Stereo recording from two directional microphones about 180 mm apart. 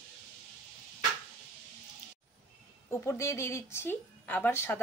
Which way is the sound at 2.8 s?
15° left (ahead or behind).